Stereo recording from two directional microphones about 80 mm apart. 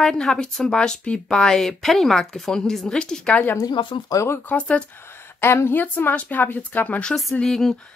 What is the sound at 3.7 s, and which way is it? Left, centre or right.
Speech, left.